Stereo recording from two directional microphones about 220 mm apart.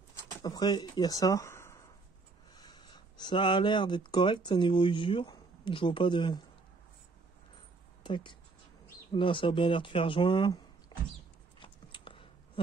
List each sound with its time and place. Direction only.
0.4 s speech: 20° left (ahead or behind)
8.0 s speech: 20° left (ahead or behind)
11.6 s a sound: 20° left (ahead or behind)